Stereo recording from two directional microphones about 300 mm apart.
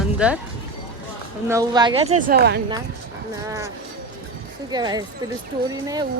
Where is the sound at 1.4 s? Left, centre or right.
Centre; by 2.6 s right.